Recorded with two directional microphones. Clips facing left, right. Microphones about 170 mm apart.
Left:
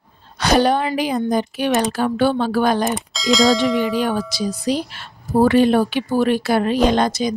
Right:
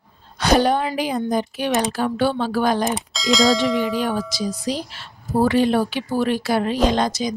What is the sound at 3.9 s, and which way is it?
A woman's voice, 70° left (ahead or behind).